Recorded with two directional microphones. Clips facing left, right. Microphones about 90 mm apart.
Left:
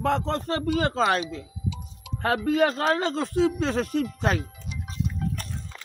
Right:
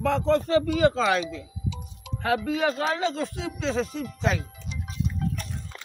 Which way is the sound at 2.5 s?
50° left (ahead or behind).